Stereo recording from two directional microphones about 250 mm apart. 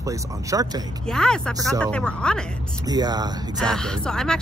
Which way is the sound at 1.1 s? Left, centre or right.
Centre.